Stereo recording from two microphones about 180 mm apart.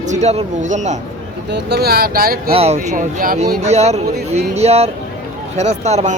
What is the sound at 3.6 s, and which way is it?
Speech, 35° right (ahead or behind).